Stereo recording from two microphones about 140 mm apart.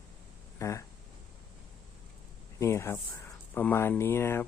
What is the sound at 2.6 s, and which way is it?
Speech, 20° left (ahead or behind).